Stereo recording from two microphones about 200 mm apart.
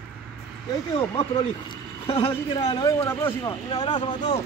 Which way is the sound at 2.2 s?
20° left (ahead or behind).